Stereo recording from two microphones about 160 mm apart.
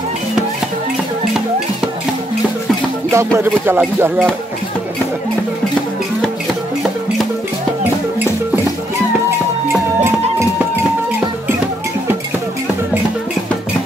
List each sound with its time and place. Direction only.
3.3 s speech: 15° right (ahead or behind)